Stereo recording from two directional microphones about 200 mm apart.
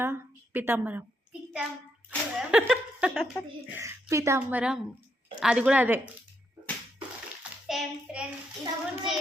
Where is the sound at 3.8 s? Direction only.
15° right (ahead or behind).